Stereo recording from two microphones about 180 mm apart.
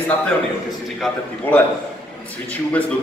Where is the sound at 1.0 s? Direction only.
10° left (ahead or behind).